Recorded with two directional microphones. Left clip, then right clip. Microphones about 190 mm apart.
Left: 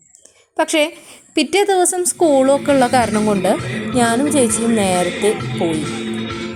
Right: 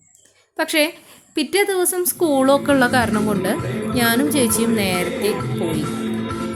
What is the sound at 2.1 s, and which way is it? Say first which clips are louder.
A woman's voice: left 3 dB; 5° right (ahead or behind).